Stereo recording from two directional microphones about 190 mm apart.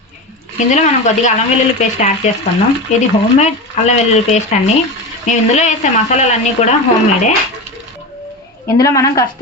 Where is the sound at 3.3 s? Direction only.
35° left (ahead or behind).